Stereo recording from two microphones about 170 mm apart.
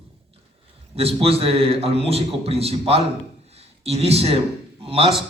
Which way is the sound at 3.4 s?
40° right (ahead or behind).